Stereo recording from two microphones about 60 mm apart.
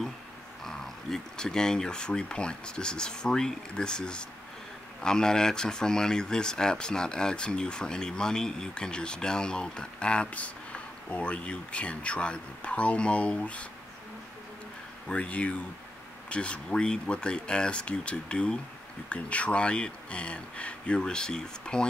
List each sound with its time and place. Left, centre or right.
0.7 s speech: centre
15.0 s speech: left